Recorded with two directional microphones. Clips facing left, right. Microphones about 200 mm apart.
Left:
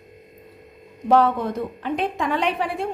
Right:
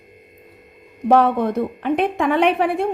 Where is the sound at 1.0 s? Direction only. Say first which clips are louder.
Right 3 dB; 60° right (ahead or behind).